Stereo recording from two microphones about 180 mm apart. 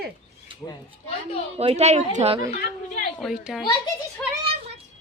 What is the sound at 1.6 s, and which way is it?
Speech, 35° right (ahead or behind).